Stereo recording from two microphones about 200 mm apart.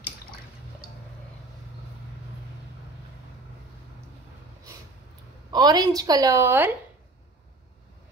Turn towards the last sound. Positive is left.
turn(degrees=-10)  # may be behind; listen again after turning